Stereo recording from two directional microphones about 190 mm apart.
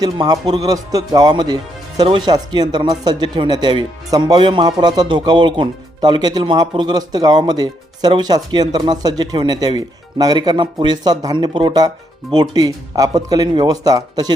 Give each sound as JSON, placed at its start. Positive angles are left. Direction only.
{"t": 0.0, "sound": "speech", "side_deg": -20}